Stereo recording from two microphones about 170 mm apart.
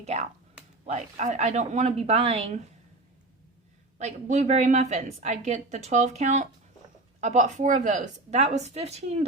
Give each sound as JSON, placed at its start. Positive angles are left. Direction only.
{"t": 0.0, "sound": "speech", "side_deg": -40}
{"t": 3.9, "sound": "a woman's voice", "side_deg": -45}